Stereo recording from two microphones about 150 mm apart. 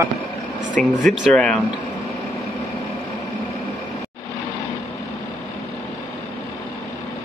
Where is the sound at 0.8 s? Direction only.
5° left (ahead or behind).